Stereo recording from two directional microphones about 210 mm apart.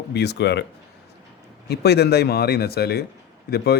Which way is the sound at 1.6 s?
50° left (ahead or behind).